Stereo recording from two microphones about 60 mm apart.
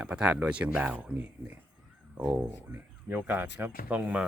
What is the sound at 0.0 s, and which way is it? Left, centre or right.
Speech, right.